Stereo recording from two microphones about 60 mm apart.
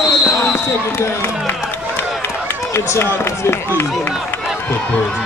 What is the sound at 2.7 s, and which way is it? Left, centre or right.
Speech, left.